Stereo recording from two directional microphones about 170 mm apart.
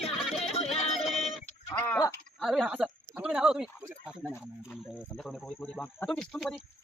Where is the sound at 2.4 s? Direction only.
Centre (ahead or behind).